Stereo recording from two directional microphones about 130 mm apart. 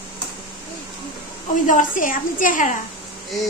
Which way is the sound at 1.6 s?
85° left.